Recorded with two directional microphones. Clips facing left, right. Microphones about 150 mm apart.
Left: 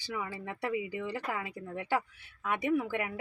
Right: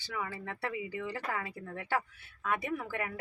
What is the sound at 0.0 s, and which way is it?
Speech, 15° left (ahead or behind).